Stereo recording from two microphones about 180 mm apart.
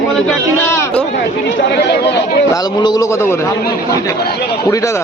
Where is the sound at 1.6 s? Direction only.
70° left (ahead or behind).